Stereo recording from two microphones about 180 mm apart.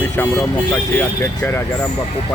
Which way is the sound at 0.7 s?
10° left (ahead or behind).